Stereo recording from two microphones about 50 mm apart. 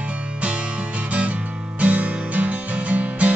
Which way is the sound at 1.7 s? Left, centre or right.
Right.